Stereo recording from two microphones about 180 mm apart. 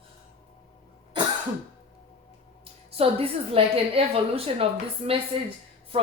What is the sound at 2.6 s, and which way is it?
Speech, 35° right (ahead or behind).